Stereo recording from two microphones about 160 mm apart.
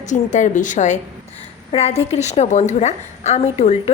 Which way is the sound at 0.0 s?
50° left (ahead or behind).